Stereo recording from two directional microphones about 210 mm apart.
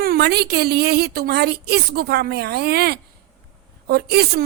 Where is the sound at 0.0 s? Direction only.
45° right (ahead or behind).